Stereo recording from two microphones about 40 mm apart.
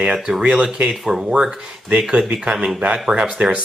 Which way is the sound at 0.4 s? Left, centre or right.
Right.